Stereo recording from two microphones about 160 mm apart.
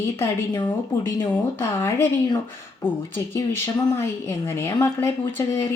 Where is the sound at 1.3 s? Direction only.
15° left (ahead or behind).